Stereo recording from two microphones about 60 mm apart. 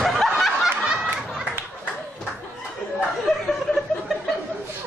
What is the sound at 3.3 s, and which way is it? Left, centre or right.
Chuckle, centre.